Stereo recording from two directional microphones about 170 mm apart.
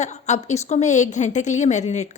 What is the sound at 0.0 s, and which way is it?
Speech, 40° left (ahead or behind).